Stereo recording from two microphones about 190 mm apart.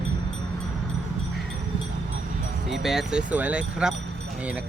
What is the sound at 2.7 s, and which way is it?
Speech, centre (ahead or behind).